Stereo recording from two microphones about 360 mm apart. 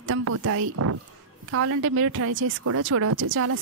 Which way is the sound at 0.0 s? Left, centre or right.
Right.